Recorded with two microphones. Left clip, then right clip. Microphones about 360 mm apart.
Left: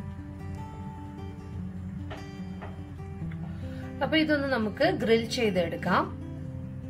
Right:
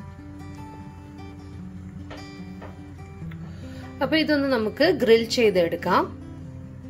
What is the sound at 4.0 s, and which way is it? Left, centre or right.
A woman's voice, right.